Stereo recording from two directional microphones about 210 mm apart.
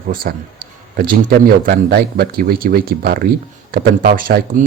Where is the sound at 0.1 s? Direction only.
40° right (ahead or behind).